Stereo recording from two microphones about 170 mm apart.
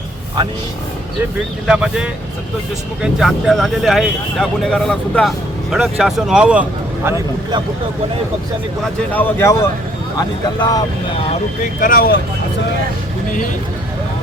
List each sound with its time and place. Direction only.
1.6 s speech: 5° right (ahead or behind)
8.8 s speech: 10° left (ahead or behind)
11.8 s speech: 55° left (ahead or behind)